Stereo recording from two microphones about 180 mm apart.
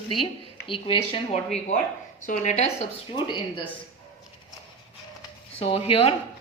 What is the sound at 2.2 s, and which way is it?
Speech, 45° left (ahead or behind).